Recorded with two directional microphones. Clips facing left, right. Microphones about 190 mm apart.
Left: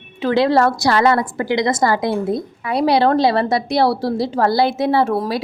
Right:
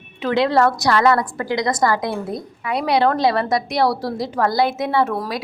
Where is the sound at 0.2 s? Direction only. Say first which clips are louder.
Left 2 dB; 30° left (ahead or behind).